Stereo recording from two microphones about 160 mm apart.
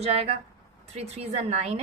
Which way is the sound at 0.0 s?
40° right (ahead or behind).